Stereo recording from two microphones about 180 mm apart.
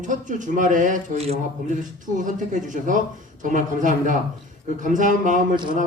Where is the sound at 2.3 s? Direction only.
45° right (ahead or behind).